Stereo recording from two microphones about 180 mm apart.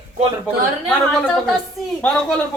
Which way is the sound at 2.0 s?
5° left (ahead or behind).